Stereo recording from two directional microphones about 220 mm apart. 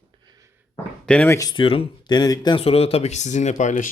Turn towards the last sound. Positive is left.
turn(degrees=35)  # may be behind; listen again after turning